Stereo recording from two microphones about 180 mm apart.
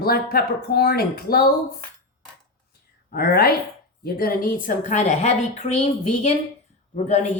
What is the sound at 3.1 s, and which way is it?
A woman's voice, 60° left (ahead or behind).